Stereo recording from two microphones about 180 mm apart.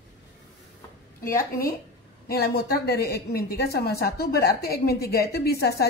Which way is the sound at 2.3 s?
60° left (ahead or behind).